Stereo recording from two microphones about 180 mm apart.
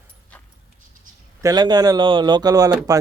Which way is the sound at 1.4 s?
20° right (ahead or behind).